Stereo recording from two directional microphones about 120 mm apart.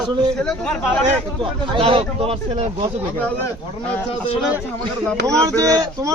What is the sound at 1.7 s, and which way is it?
Speech, 45° right (ahead or behind).